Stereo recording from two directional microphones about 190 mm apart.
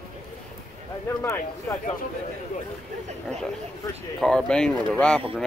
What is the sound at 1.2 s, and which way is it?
Speech, 15° left (ahead or behind).